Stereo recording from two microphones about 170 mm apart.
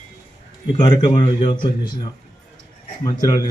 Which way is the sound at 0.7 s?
30° left (ahead or behind).